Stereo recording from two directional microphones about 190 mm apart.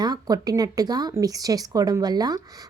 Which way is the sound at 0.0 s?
20° right (ahead or behind).